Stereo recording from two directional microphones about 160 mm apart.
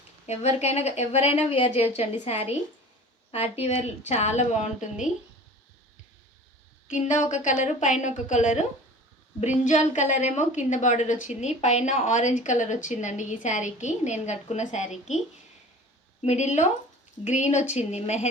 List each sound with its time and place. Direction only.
0.3 s a woman's voice: 45° left (ahead or behind)
6.9 s a woman's voice: 50° left (ahead or behind)
9.6 s a woman's voice: 50° left (ahead or behind)
16.2 s a woman's voice: 45° left (ahead or behind)